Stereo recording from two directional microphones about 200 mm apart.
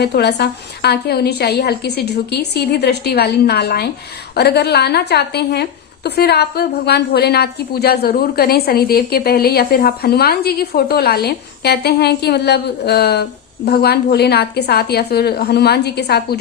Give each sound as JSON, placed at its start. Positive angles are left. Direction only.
{"t": 0.0, "sound": "a woman's voice", "side_deg": 55}